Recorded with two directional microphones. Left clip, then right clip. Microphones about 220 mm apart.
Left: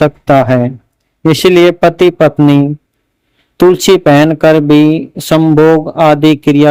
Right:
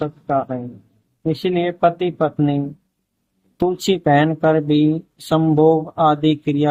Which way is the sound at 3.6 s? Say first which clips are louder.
Left 12 dB; 40° left (ahead or behind).